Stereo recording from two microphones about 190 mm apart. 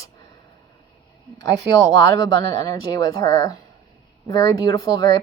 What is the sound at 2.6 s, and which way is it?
Speech, 20° left (ahead or behind).